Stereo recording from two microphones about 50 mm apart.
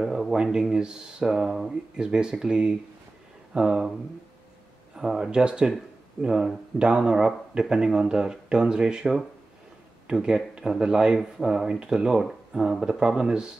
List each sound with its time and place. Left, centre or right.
0.0 s speech: centre
4.9 s speech: centre
10.2 s speech: centre